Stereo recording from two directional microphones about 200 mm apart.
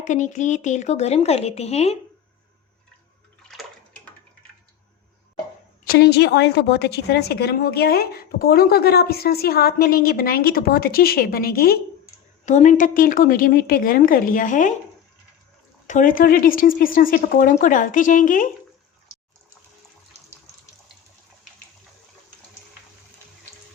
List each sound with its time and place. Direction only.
0.0 s speech: 40° left (ahead or behind)
5.8 s a woman's voice: 50° left (ahead or behind)
12.5 s a woman's voice: 40° left (ahead or behind)
15.9 s a woman's voice: 40° left (ahead or behind)